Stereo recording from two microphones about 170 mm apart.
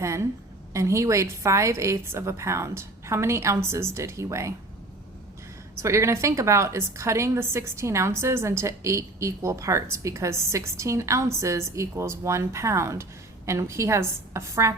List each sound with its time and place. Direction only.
0.0 s a woman's voice: 15° right (ahead or behind)
5.8 s a woman's voice: 15° right (ahead or behind)